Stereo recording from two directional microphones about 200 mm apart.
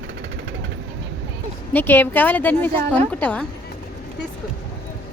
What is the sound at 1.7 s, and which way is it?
A woman's voice, 10° left (ahead or behind).